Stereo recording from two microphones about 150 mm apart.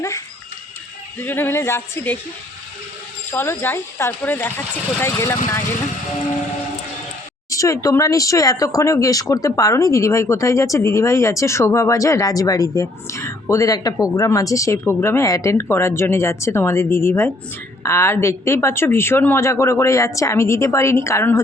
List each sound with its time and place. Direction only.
1.2 s speech: 15° left (ahead or behind)
3.3 s speech: 15° left (ahead or behind)
7.5 s speech: 20° left (ahead or behind)